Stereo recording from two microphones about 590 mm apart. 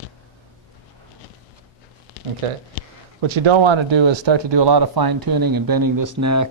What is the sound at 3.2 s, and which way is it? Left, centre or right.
Speech, right.